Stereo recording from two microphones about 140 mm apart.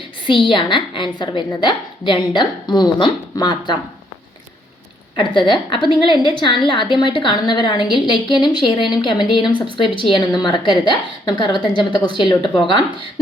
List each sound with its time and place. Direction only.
0.3 s a woman's voice: 35° left (ahead or behind)
5.1 s a woman's voice: 35° left (ahead or behind)